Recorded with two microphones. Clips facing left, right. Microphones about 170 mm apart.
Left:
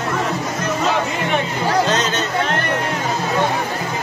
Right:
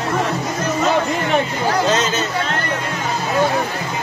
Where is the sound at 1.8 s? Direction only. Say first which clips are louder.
Right 2 dB; centre (ahead or behind).